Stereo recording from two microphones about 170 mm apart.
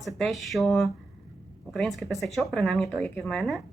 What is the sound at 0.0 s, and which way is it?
Speech, centre (ahead or behind).